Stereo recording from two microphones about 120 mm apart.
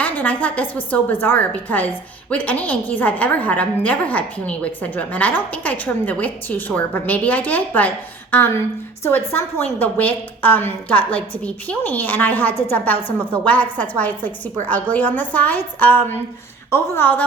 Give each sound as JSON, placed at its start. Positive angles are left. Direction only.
{"t": 0.0, "sound": "a woman's voice", "side_deg": 15}